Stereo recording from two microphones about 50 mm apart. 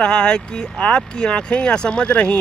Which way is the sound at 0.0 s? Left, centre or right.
Centre.